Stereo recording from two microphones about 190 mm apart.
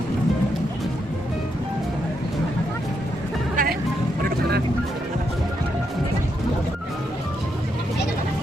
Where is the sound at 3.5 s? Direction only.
45° right (ahead or behind).